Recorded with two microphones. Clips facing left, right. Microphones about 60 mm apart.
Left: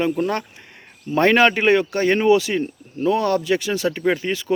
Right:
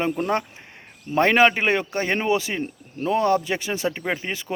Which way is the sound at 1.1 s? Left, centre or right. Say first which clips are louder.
Left 2 dB; centre.